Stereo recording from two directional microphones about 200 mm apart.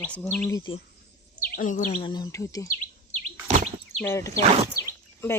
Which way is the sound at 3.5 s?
35° right (ahead or behind).